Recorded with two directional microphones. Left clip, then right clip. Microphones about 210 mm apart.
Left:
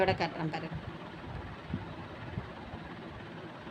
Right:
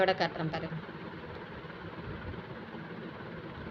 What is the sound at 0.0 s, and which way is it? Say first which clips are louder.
Speech: right 1 dB; 20° left (ahead or behind).